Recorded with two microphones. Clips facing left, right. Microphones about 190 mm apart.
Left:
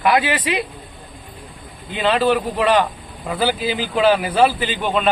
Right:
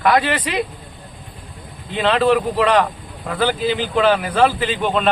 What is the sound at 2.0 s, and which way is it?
Speech, centre (ahead or behind).